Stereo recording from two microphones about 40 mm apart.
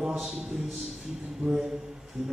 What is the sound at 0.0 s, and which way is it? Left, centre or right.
A man's voice, centre.